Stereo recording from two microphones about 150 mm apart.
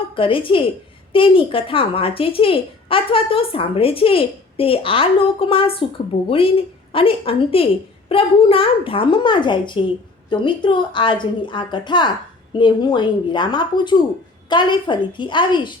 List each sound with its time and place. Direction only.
0.2 s a child's voice: 35° left (ahead or behind)